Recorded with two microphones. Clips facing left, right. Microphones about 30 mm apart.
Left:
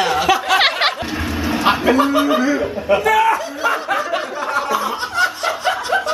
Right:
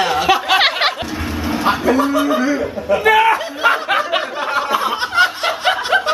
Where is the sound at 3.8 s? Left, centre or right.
Right.